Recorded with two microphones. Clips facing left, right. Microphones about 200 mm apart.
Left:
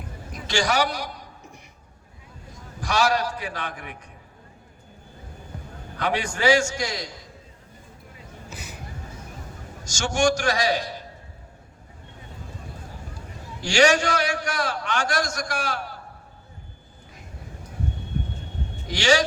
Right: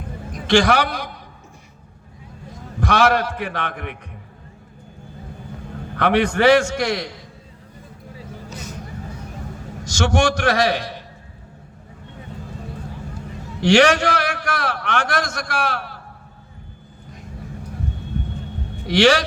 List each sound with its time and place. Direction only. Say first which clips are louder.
0.4 s a man's voice: right 7 dB; 60° right (ahead or behind)
2.8 s a man's voice: right 5 dB; 55° right (ahead or behind)
6.0 s a man's voice: right 8 dB; 60° right (ahead or behind)
8.4 s vehicle: right 4 dB; 10° left (ahead or behind)
9.8 s a man's voice: right 3 dB; 60° right (ahead or behind)
13.6 s a man's voice: right 5 dB; 60° right (ahead or behind)
18.9 s a man's voice: right 6 dB; 60° right (ahead or behind)